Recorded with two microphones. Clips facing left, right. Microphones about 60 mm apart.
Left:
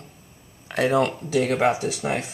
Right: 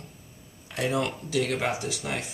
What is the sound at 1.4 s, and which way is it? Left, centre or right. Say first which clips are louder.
Speech: left 7 dB; left.